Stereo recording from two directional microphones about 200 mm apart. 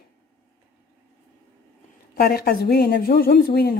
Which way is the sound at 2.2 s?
50° left (ahead or behind).